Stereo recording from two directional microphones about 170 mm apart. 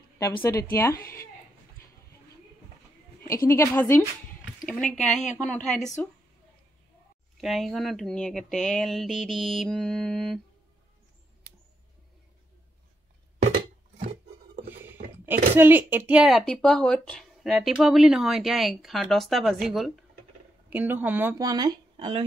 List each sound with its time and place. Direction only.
0.4 s speech: 15° left (ahead or behind)
3.3 s speech: 15° left (ahead or behind)
4.6 s speech: centre (ahead or behind)
7.3 s speech: centre (ahead or behind)
13.9 s a sound: 55° right (ahead or behind)
15.5 s speech: 10° right (ahead or behind)
20.7 s a woman's voice: 10° right (ahead or behind)
21.4 s speech: 20° right (ahead or behind)